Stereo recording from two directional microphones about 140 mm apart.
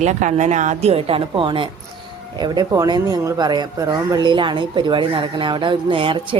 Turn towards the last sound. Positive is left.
turn(degrees=-40)  # may be behind; listen again after turning